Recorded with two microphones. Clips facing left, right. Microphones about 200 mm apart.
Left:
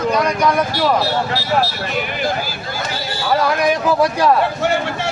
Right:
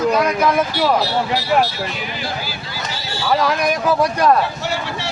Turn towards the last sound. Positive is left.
turn(degrees=5)  # may be behind; listen again after turning